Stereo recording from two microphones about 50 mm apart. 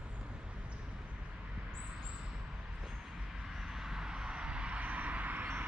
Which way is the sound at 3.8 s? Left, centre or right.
Centre.